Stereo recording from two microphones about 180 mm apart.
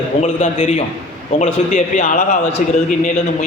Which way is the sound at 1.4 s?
45° left (ahead or behind).